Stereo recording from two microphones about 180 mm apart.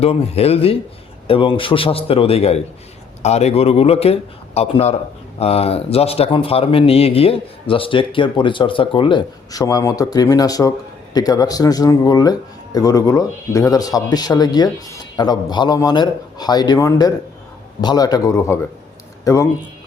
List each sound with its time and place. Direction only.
0.0 s a man's voice: 35° left (ahead or behind); by 19.5 s 15° left (ahead or behind)